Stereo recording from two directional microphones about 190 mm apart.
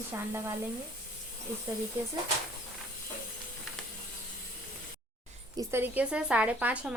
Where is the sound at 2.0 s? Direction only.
15° right (ahead or behind).